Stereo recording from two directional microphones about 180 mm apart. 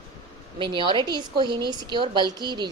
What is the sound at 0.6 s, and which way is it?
Speech, 30° right (ahead or behind).